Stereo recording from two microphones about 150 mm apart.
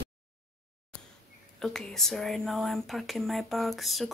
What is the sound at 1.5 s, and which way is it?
Speech, 5° left (ahead or behind).